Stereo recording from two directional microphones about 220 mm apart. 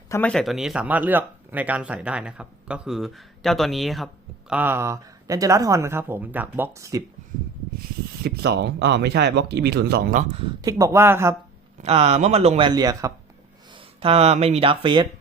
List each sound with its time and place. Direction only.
0.1 s speech: 5° left (ahead or behind); by 7.0 s 15° right (ahead or behind)
7.8 s speech: 45° right (ahead or behind)
10.3 s speech: 20° right (ahead or behind)
11.8 s speech: 30° right (ahead or behind)